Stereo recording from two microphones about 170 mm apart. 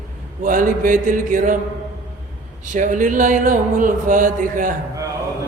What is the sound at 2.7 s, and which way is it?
Speech, 50° right (ahead or behind).